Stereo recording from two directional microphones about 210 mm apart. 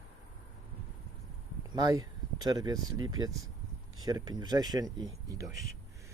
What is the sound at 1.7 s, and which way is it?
Speech, 20° right (ahead or behind).